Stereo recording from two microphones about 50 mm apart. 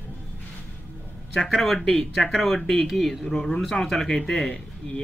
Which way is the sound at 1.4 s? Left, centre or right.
Centre.